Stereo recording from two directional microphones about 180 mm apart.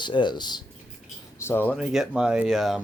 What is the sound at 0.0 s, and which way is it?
Speech, 25° left (ahead or behind).